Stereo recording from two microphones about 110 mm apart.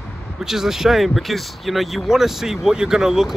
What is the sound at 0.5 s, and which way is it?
Speech, 5° right (ahead or behind).